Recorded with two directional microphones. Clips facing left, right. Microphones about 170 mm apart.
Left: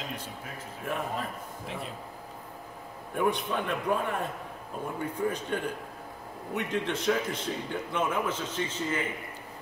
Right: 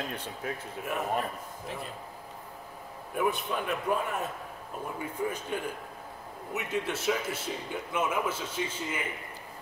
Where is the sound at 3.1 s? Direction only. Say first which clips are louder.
Left 2 dB; 5° right (ahead or behind).